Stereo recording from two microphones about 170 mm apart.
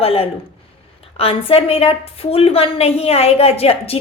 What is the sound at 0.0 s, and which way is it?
A woman's voice, 35° left (ahead or behind).